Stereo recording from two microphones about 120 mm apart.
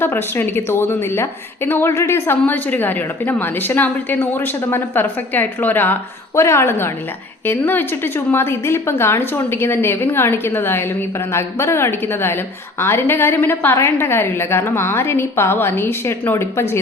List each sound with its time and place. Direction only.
0.0 s a woman's voice: 20° left (ahead or behind)